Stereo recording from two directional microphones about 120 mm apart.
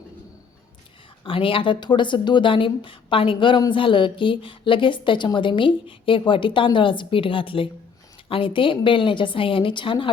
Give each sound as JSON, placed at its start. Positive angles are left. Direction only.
{"t": 1.2, "sound": "a woman's voice", "side_deg": 45}